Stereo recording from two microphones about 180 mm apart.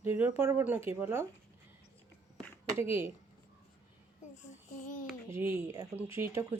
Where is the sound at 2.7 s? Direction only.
15° right (ahead or behind).